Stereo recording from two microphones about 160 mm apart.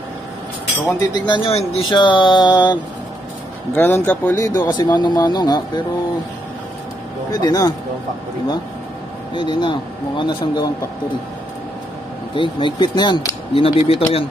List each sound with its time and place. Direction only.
1.1 s speech: 30° left (ahead or behind)
3.7 s speech: 15° left (ahead or behind)
4.5 s speech: 25° left (ahead or behind)
7.2 s speech: 25° left (ahead or behind)
9.3 s speech: 30° left (ahead or behind)
12.4 s speech: 30° left (ahead or behind)
13.6 s speech: 35° left (ahead or behind)